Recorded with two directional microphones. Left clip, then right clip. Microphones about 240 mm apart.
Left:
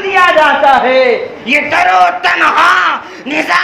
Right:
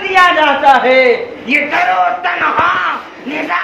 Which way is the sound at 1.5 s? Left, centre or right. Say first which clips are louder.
Left 3 dB; left.